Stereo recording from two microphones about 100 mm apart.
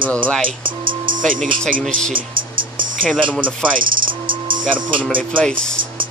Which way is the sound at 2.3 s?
55° right (ahead or behind).